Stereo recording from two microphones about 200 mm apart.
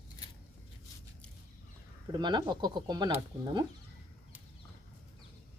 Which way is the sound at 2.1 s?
20° right (ahead or behind).